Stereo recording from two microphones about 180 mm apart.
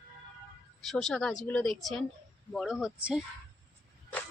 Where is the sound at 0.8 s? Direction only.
Centre (ahead or behind).